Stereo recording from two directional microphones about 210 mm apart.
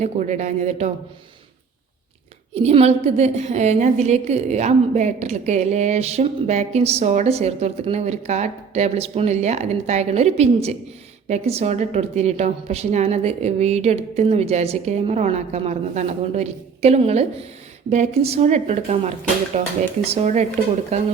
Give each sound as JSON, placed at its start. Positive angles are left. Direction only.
{"t": 0.0, "sound": "a woman's voice", "side_deg": -35}
{"t": 2.6, "sound": "a woman's voice", "side_deg": -30}